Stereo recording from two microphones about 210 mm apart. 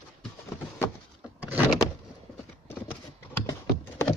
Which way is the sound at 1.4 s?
10° right (ahead or behind).